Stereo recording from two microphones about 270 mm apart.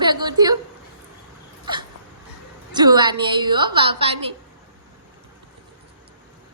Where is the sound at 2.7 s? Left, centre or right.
Centre.